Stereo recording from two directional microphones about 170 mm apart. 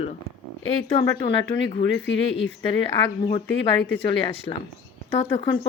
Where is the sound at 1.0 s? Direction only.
30° left (ahead or behind).